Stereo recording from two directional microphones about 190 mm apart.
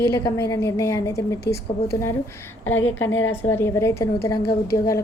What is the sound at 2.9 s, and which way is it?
A woman's voice, 10° left (ahead or behind).